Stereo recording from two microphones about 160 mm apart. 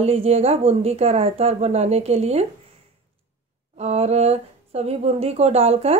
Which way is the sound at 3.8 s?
40° right (ahead or behind).